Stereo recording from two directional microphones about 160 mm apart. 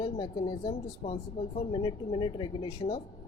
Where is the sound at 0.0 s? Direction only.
30° left (ahead or behind).